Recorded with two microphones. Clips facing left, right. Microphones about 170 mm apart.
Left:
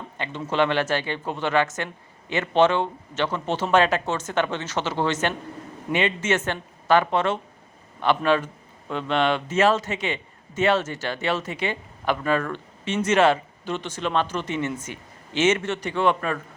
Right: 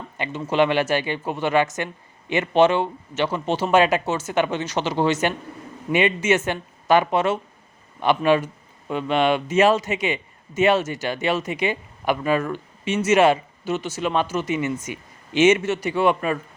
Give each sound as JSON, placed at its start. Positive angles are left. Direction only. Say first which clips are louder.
{"t": 0.2, "sound": "a man's voice", "louder": "right 3 dB", "side_deg": -15}